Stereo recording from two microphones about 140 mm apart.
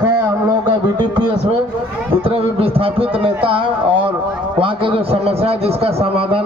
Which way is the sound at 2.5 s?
45° right (ahead or behind).